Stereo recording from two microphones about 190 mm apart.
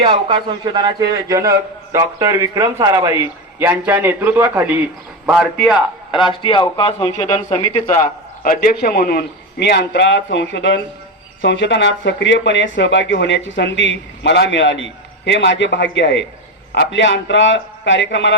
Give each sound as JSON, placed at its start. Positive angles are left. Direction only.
{"t": 0.0, "sound": "a man's voice", "side_deg": -25}
{"t": 6.1, "sound": "speech", "side_deg": 25}
{"t": 7.6, "sound": "a man's voice", "side_deg": 40}